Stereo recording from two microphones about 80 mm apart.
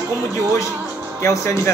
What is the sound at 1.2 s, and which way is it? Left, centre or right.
Speech, left.